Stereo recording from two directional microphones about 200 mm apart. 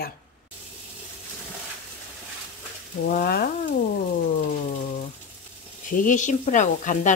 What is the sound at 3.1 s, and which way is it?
Frying, 50° left (ahead or behind).